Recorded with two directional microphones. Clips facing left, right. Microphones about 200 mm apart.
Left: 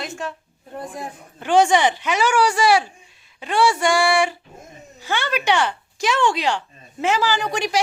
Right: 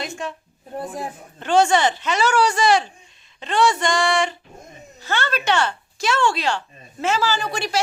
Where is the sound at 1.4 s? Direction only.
15° left (ahead or behind).